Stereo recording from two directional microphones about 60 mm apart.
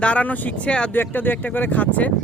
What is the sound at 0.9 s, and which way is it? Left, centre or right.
Speech, left.